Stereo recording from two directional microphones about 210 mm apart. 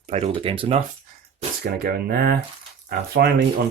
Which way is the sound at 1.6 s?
45° right (ahead or behind).